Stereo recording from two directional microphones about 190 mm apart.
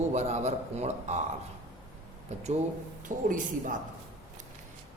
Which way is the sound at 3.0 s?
45° right (ahead or behind).